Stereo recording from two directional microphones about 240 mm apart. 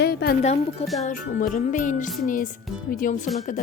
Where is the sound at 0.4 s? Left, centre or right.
Left.